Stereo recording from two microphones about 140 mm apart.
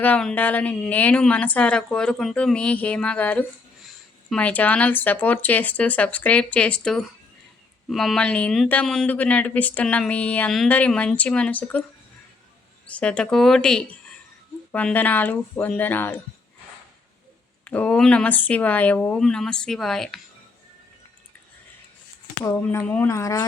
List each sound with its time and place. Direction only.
0.0 s speech: 10° left (ahead or behind)
12.9 s speech: 10° left (ahead or behind)
17.7 s speech: 10° left (ahead or behind)
22.6 s speech: 10° left (ahead or behind)
23.0 s speech: 20° left (ahead or behind)